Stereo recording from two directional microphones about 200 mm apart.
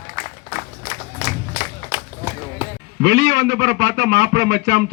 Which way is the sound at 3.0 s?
75° right (ahead or behind).